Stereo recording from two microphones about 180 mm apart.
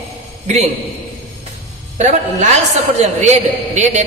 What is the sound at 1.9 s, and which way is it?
A man's voice, 40° right (ahead or behind).